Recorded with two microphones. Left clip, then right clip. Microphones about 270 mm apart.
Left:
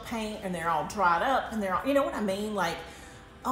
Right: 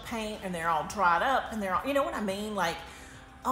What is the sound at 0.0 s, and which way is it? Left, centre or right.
A woman's voice, centre.